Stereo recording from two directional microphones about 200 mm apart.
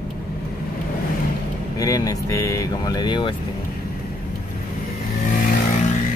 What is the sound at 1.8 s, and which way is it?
Speech, 15° left (ahead or behind).